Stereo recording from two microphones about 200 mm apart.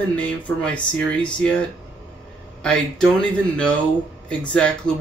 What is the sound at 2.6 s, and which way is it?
Speech, 5° left (ahead or behind).